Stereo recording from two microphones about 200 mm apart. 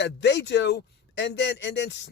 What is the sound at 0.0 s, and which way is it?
A man's voice, 60° left (ahead or behind).